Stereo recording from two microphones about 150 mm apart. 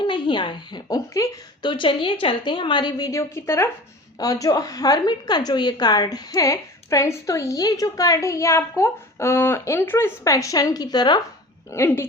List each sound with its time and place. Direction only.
0.0 s a woman's voice: 30° left (ahead or behind)
11.7 s speech: 15° left (ahead or behind)